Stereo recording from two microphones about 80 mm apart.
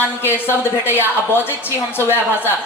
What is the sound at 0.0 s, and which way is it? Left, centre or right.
Speech, left.